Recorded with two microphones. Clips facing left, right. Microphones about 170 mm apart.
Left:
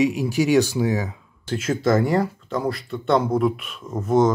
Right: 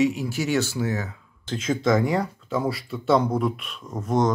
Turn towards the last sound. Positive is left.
turn(degrees=0)  # may be behind; listen again after turning